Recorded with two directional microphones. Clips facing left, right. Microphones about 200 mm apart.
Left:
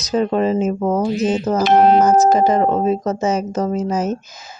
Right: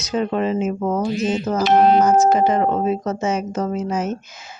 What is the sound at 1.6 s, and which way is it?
Speech, 50° left (ahead or behind).